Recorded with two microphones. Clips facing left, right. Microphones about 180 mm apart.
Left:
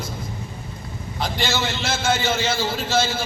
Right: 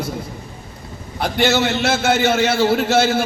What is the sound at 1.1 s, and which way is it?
A man's voice, 65° right (ahead or behind).